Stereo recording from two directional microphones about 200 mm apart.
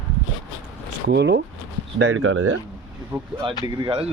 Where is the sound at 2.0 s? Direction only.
85° right.